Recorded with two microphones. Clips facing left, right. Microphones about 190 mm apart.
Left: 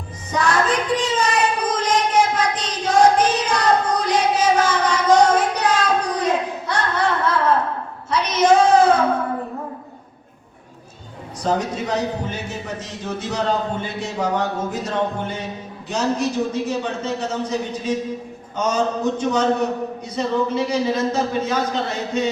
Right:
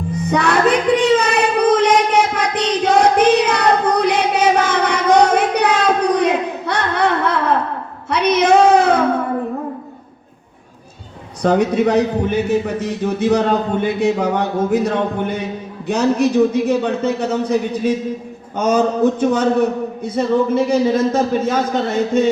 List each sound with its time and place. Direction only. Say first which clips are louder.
0.3 s child singing: right 4 dB; 65° right (ahead or behind)
11.4 s speech: right 8 dB; 65° right (ahead or behind)